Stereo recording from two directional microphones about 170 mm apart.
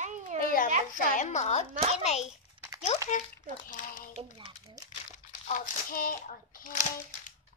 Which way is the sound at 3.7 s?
50° left (ahead or behind).